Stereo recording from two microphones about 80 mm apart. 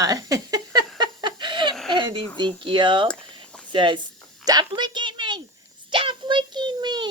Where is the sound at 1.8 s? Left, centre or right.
Right.